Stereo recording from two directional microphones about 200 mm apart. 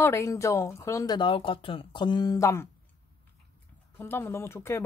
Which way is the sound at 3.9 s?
10° left (ahead or behind).